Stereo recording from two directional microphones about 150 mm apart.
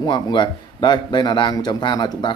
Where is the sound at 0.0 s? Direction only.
30° left (ahead or behind).